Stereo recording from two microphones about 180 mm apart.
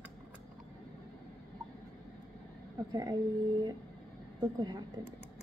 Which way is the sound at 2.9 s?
25° right (ahead or behind).